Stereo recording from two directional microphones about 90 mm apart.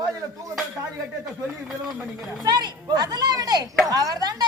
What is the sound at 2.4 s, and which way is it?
Speech, 50° right (ahead or behind).